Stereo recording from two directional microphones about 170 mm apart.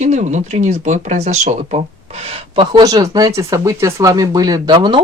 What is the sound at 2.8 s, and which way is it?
Speech, 20° right (ahead or behind).